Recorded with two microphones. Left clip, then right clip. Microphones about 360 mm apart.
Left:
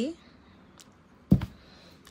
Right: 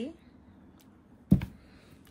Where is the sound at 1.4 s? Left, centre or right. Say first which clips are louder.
Left 2 dB; centre.